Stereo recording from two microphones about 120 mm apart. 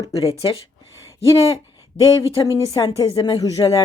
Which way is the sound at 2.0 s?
25° left (ahead or behind).